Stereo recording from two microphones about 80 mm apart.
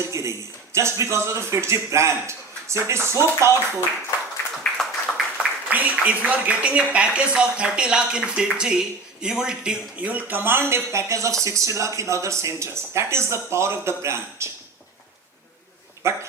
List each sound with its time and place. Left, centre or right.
0.0 s speech: right
4.8 s a sound: centre
5.7 s speech: centre; by 14.5 s right
16.0 s speech: right